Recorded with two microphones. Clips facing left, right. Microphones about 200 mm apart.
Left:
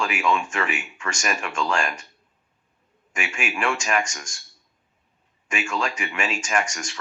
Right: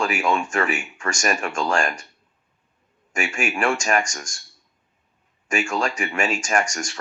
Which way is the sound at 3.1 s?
45° right (ahead or behind).